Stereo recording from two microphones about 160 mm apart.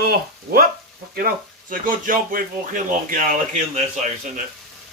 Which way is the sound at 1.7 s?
60° right (ahead or behind).